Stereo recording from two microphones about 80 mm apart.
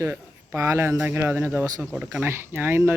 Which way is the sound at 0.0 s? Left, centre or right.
Right.